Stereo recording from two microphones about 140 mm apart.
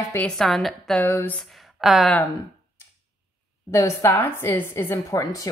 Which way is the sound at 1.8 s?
Centre (ahead or behind).